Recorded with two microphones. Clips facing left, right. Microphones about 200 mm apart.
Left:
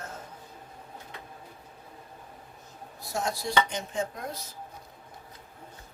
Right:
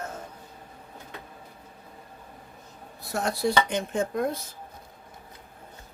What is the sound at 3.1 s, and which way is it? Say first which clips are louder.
Speech: right 3 dB; 60° right (ahead or behind).